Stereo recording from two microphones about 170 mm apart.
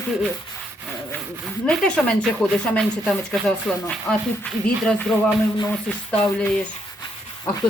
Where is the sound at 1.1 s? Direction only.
5° left (ahead or behind).